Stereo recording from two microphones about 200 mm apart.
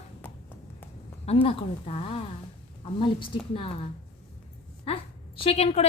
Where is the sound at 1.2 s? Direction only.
30° left (ahead or behind).